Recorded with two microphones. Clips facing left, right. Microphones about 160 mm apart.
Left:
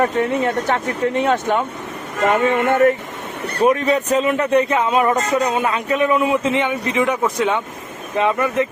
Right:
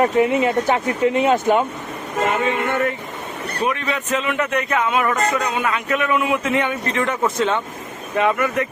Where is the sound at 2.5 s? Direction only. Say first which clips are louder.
Left 6 dB; 45° left (ahead or behind); by 7.6 s 10° left (ahead or behind).